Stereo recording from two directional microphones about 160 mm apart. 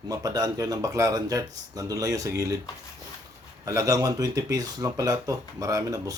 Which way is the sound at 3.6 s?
20° right (ahead or behind).